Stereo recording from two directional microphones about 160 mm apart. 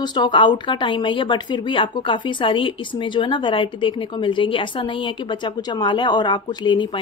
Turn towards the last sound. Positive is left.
turn(degrees=30)  # may be behind; listen again after turning